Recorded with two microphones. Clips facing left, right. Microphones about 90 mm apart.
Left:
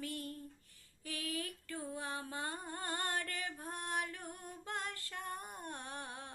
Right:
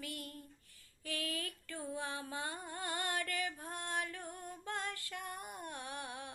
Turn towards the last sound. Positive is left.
turn(degrees=35)  # may be behind; listen again after turning